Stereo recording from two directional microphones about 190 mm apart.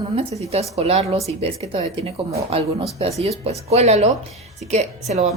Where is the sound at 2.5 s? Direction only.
30° right (ahead or behind).